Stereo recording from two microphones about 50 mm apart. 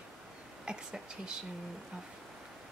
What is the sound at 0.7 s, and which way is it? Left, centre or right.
Speech, centre.